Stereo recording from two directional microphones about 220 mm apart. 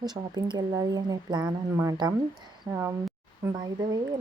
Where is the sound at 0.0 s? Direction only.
20° right (ahead or behind).